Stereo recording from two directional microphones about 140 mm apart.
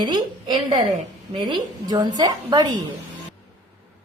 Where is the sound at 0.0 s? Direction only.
35° right (ahead or behind).